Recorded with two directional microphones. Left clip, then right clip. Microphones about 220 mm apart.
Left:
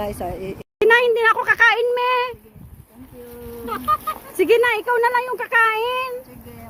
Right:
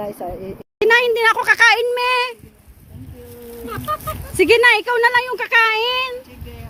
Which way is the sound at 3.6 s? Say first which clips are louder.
Left 4 dB; centre (ahead or behind).